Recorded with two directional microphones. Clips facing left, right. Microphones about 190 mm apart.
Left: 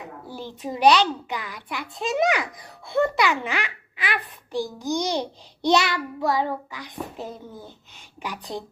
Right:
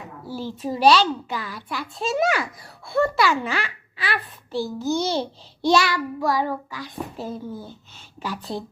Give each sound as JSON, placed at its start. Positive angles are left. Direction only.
{"t": 0.3, "sound": "a child's voice", "side_deg": 15}
{"t": 5.6, "sound": "child singing", "side_deg": 20}